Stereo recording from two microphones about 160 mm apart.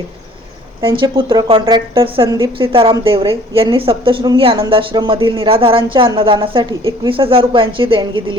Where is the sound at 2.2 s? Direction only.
20° right (ahead or behind).